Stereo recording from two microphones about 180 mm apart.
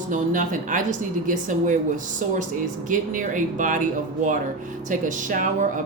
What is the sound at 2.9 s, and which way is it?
Speech, 45° right (ahead or behind).